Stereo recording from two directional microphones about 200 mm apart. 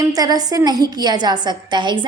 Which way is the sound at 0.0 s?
20° right (ahead or behind).